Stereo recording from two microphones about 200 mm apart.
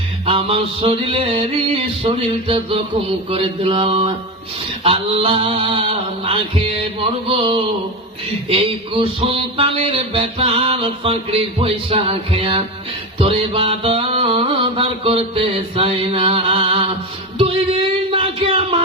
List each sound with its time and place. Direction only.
0.3 s music: 30° right (ahead or behind)
7.3 s music: 25° right (ahead or behind)